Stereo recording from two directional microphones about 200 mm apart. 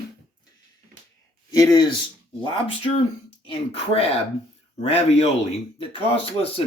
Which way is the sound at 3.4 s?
30° left (ahead or behind).